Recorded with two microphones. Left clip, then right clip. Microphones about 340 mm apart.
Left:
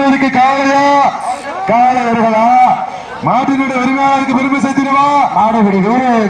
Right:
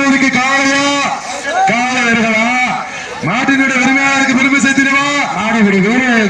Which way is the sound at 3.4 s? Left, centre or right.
Centre.